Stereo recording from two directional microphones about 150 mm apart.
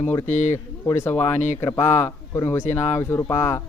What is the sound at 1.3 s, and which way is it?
Speech, 50° left (ahead or behind).